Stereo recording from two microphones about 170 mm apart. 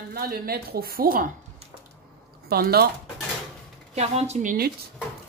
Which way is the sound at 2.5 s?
65° right (ahead or behind).